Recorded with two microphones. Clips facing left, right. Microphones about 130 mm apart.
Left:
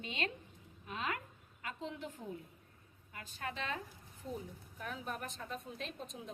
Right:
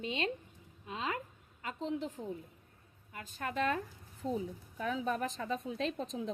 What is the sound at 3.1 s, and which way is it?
Speech, 40° right (ahead or behind).